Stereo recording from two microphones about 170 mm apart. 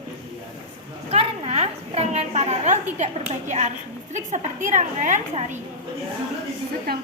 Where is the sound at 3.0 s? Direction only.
45° right (ahead or behind).